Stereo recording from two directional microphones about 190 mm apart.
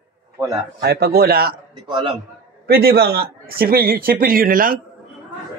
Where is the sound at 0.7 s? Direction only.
55° right (ahead or behind).